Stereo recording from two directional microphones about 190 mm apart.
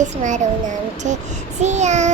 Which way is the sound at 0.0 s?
40° right (ahead or behind).